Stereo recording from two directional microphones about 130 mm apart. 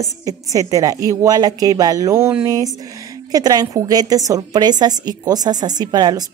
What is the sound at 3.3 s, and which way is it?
A woman's voice, 30° right (ahead or behind).